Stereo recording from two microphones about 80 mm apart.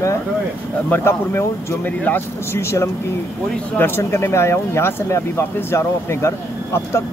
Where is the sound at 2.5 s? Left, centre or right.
Left.